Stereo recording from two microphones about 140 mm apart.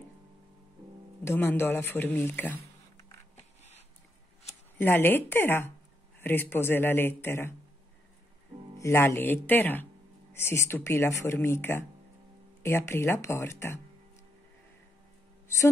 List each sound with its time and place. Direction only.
1.2 s speech: 15° left (ahead or behind)
4.7 s speech: 15° left (ahead or behind)
8.7 s speech: 20° left (ahead or behind)
15.4 s a sound: 20° left (ahead or behind)